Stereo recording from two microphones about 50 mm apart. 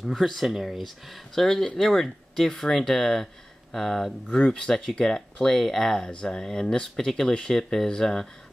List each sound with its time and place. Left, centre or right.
0.0 s speech: centre